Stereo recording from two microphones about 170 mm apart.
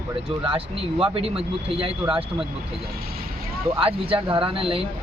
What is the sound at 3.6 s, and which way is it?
Speech, 35° right (ahead or behind).